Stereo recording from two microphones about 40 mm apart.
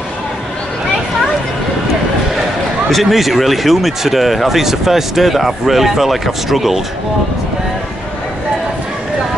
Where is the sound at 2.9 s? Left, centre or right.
Centre.